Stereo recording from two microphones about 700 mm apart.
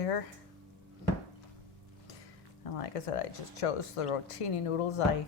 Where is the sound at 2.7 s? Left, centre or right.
Left.